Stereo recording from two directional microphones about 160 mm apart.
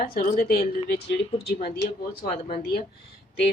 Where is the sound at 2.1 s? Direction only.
65° left (ahead or behind).